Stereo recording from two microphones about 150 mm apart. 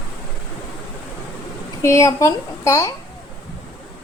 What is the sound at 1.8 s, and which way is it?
A woman's voice, 20° left (ahead or behind).